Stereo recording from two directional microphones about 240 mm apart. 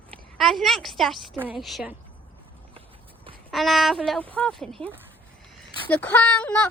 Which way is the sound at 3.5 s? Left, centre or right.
Centre.